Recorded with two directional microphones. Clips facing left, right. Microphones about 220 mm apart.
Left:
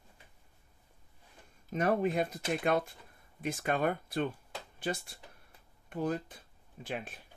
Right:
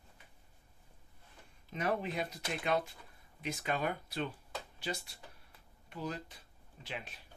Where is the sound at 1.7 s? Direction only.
45° left (ahead or behind).